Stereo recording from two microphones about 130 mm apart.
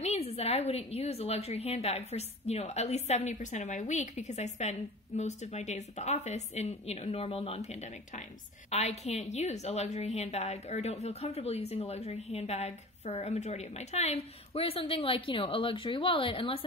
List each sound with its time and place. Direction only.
0.0 s a woman's voice: 55° left (ahead or behind)